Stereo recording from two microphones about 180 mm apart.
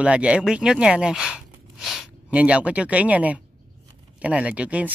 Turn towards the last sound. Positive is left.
turn(degrees=-10)  # may be behind; listen again after turning